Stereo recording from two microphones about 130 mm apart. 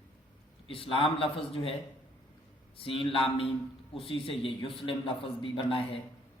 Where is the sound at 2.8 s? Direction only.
45° left (ahead or behind).